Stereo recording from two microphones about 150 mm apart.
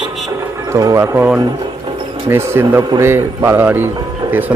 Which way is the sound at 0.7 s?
20° right (ahead or behind).